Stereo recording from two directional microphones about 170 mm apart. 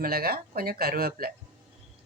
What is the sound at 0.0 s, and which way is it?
Speech, 60° right (ahead or behind).